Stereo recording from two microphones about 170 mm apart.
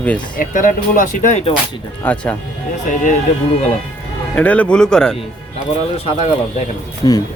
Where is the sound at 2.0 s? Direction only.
10° left (ahead or behind).